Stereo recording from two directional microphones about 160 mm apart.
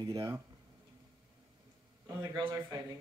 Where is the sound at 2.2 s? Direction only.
25° right (ahead or behind).